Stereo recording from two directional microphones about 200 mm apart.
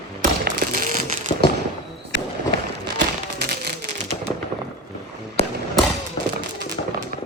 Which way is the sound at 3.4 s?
50° right (ahead or behind).